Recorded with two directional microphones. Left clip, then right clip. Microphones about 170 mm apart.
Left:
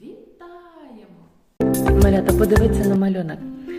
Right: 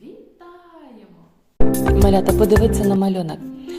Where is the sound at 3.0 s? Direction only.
20° right (ahead or behind).